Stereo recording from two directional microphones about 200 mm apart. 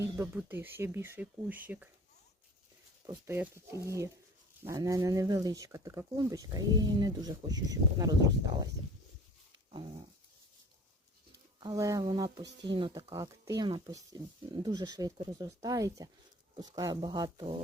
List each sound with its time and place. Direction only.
0.0 s speech: 10° right (ahead or behind)
3.1 s speech: 10° right (ahead or behind)
11.6 s speech: 15° right (ahead or behind)